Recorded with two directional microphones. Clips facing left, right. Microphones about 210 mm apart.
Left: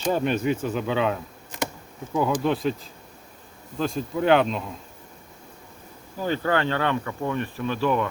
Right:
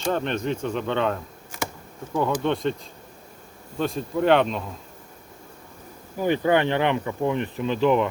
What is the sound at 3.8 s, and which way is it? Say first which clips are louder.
Speech: right 1 dB; centre (ahead or behind).